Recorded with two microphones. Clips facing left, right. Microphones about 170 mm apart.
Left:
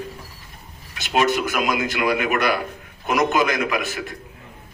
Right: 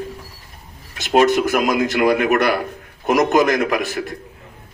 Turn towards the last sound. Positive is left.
turn(degrees=-40)  # may be behind; listen again after turning